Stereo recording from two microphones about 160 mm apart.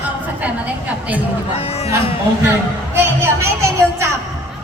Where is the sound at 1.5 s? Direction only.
40° left (ahead or behind).